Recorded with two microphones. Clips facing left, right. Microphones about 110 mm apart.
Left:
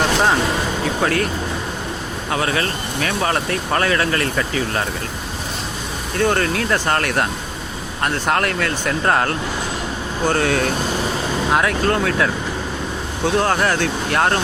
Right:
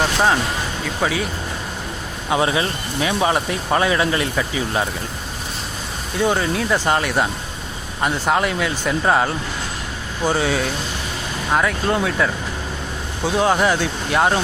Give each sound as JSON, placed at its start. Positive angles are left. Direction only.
{"t": 1.0, "sound": "speech", "side_deg": -5}
{"t": 2.3, "sound": "speech", "side_deg": -20}
{"t": 6.1, "sound": "speech", "side_deg": -10}